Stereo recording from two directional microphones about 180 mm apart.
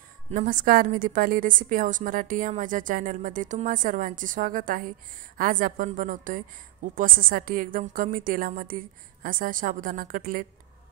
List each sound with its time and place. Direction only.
0.3 s a woman's voice: 45° right (ahead or behind)